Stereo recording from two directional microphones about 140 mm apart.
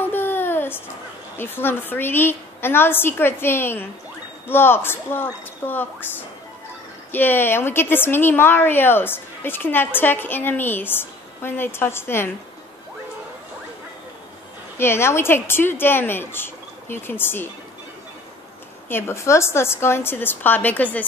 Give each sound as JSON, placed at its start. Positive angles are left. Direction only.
{"t": 0.0, "sound": "a sound", "side_deg": 15}
{"t": 1.4, "sound": "a woman's voice", "side_deg": 15}
{"t": 14.8, "sound": "a woman's voice", "side_deg": 20}
{"t": 18.9, "sound": "a woman's voice", "side_deg": 15}